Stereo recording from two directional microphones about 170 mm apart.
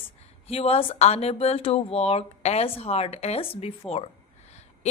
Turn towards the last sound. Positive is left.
turn(degrees=35)  # may be behind; listen again after turning